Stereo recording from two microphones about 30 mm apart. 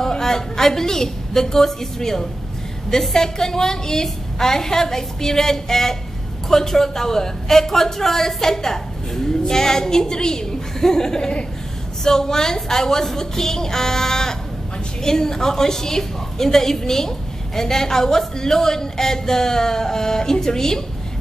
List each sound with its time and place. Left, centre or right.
0.0 s a woman's voice: centre